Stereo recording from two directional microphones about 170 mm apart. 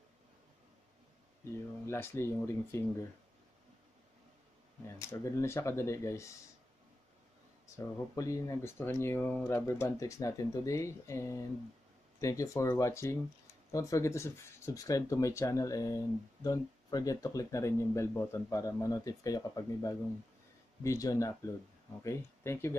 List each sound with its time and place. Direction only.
1.9 s speech: 15° left (ahead or behind)
4.8 s speech: 15° left (ahead or behind)
7.6 s speech: 20° left (ahead or behind)